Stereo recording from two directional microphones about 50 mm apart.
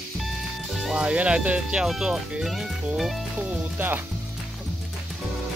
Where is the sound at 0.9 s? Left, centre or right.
Right.